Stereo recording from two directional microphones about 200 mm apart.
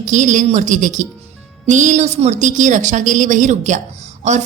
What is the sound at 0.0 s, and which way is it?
Speech, 35° right (ahead or behind).